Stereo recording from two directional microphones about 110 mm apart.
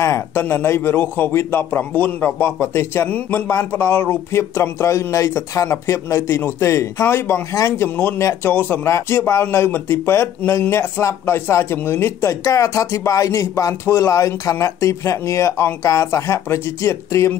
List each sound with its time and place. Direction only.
0.0 s a man's voice: 25° left (ahead or behind)